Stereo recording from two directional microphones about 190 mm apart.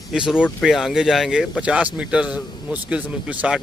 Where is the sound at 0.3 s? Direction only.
Centre (ahead or behind).